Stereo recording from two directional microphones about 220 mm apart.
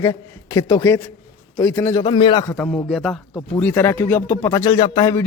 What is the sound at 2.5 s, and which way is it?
Speech, 5° left (ahead or behind).